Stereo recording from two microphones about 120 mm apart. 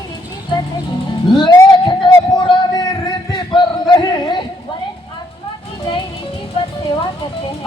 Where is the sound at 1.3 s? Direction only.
40° left (ahead or behind).